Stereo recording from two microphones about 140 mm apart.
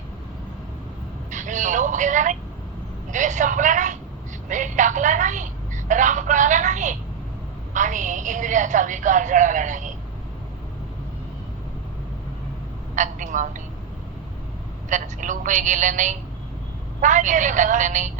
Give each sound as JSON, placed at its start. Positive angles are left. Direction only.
{"t": 1.3, "sound": "a sound", "side_deg": -60}
{"t": 3.1, "sound": "a woman's voice", "side_deg": -60}
{"t": 13.0, "sound": "a woman's voice", "side_deg": -65}
{"t": 14.8, "sound": "a woman's voice", "side_deg": -65}